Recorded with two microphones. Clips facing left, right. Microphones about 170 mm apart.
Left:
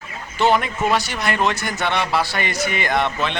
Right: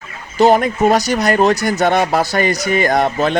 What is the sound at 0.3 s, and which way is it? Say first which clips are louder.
Speech: right 7 dB; 40° right (ahead or behind).